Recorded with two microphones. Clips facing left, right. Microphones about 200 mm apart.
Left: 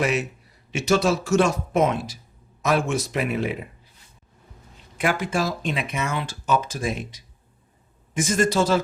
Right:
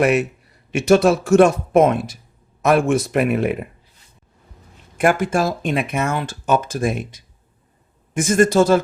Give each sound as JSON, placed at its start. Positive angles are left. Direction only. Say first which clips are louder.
{"t": 0.0, "sound": "a man's voice", "louder": "right 7 dB", "side_deg": -55}
{"t": 4.9, "sound": "speech", "louder": "right 6 dB", "side_deg": -50}